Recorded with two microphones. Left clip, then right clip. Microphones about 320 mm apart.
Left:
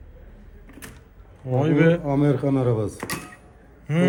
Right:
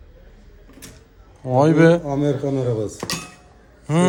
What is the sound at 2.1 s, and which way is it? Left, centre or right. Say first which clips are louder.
Speech: even; left.